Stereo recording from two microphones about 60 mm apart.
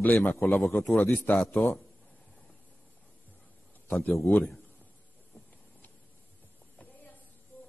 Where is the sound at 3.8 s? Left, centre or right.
Left.